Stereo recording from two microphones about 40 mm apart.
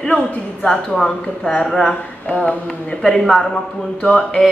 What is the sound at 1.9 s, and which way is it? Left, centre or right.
Speech, left.